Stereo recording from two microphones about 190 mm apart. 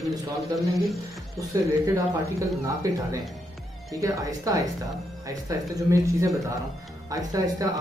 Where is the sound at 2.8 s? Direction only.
15° right (ahead or behind).